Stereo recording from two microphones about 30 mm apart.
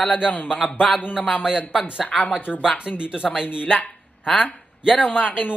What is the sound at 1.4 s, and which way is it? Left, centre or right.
Speech, right.